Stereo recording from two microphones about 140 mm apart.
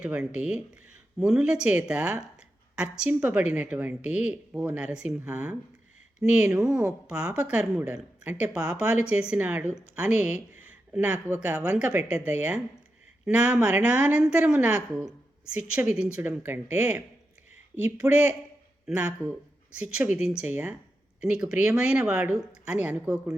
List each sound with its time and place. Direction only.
0.0 s a woman's voice: 10° right (ahead or behind)
18.0 s speech: 25° right (ahead or behind)
18.9 s a woman's voice: 10° right (ahead or behind)